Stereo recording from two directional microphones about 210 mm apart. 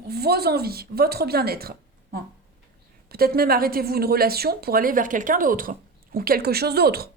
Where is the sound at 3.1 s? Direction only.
45° right (ahead or behind).